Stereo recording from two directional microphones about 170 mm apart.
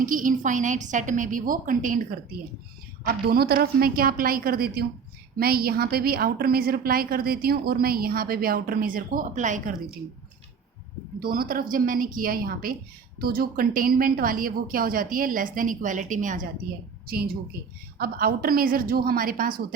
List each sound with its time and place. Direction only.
0.0 s a woman's voice: 50° right (ahead or behind)
3.0 s a woman's voice: 65° right (ahead or behind); by 9.7 s 45° right (ahead or behind)
11.2 s a woman's voice: 60° right (ahead or behind)
17.1 s a woman's voice: 60° right (ahead or behind)